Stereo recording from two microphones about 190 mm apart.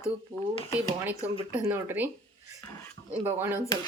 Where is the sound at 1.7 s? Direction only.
10° right (ahead or behind).